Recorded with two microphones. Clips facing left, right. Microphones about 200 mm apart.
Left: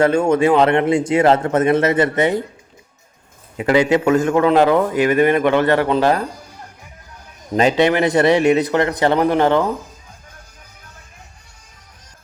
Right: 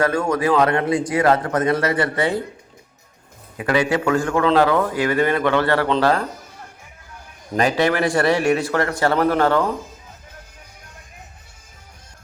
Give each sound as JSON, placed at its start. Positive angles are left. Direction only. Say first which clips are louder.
{"t": 0.0, "sound": "a man's voice", "louder": "left 5 dB", "side_deg": 25}
{"t": 3.6, "sound": "a man's voice", "louder": "left 5 dB", "side_deg": 20}
{"t": 7.5, "sound": "a man's voice", "louder": "left 4 dB", "side_deg": 25}